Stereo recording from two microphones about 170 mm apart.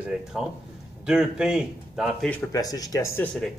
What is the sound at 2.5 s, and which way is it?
Speech, 20° left (ahead or behind).